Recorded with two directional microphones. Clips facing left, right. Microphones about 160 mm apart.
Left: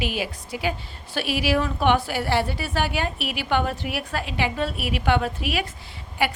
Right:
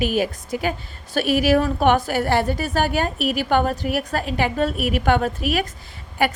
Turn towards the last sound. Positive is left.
turn(degrees=-45)  # may be behind; listen again after turning